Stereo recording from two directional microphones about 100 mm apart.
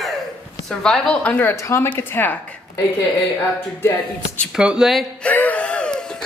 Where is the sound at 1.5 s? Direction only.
30° left (ahead or behind).